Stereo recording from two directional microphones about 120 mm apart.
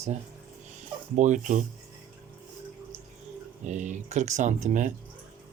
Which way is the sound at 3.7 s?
80° right.